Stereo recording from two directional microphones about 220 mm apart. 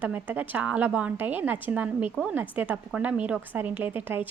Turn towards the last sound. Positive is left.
turn(degrees=-10)  # may be behind; listen again after turning